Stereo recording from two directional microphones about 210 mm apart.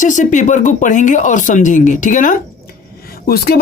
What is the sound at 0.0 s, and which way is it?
Speech, 35° left (ahead or behind).